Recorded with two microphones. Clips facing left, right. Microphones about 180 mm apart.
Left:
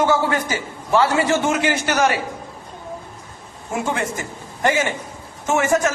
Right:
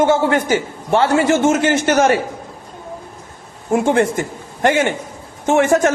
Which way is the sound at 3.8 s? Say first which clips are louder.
Right 8 dB; 55° right (ahead or behind).